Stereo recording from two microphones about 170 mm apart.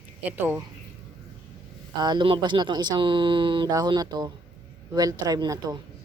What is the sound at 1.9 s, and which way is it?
Speech, 25° right (ahead or behind).